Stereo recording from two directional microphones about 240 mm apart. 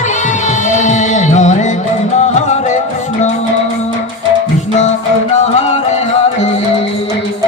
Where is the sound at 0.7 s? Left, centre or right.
Left.